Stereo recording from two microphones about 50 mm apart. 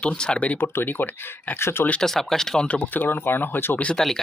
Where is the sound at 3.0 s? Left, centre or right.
Left.